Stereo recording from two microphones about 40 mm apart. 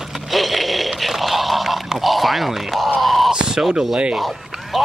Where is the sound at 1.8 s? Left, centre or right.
Centre.